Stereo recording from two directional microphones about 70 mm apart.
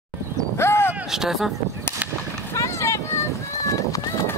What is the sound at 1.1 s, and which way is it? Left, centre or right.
Speech, centre.